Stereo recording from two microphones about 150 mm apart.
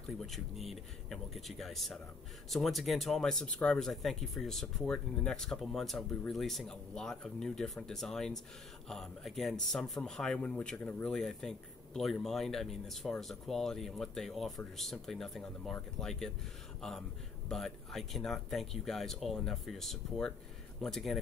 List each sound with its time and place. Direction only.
0.3 s speech: centre (ahead or behind)
17.5 s speech: centre (ahead or behind)